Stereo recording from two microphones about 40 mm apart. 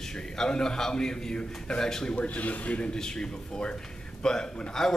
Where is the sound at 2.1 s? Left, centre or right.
Left.